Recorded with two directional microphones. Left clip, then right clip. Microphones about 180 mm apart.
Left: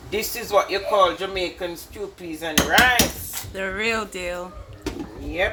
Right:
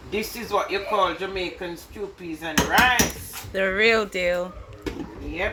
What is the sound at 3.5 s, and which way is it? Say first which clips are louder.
Speech: right 5 dB; 15° right (ahead or behind).